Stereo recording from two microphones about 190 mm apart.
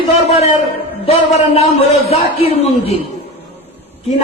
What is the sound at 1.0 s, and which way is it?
A man's voice, 30° left (ahead or behind).